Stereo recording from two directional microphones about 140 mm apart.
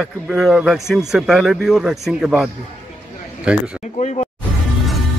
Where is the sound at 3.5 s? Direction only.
5° right (ahead or behind).